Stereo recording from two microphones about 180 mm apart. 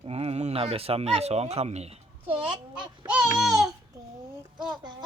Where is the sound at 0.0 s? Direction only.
35° right (ahead or behind).